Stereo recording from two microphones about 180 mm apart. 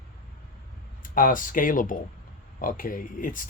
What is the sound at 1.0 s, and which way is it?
Speech, 50° left (ahead or behind).